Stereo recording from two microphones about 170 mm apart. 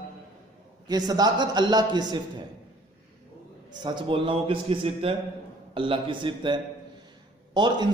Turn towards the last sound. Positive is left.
turn(degrees=-25)  # may be behind; listen again after turning